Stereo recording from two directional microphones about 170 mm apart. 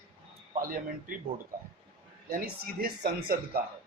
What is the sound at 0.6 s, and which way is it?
Speech, 55° right (ahead or behind).